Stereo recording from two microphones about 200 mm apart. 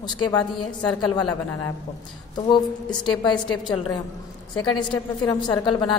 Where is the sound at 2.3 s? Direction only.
20° left (ahead or behind).